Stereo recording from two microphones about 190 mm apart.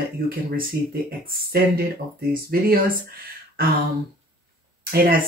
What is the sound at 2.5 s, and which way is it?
Speech, 50° right (ahead or behind).